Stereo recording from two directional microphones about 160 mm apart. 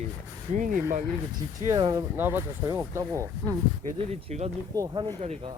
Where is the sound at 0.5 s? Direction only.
55° right (ahead or behind).